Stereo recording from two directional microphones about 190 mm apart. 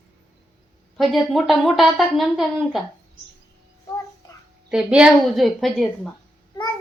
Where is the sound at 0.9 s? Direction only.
Centre (ahead or behind).